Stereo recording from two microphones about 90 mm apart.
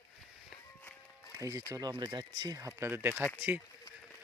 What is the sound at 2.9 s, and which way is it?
Speech, 25° right (ahead or behind).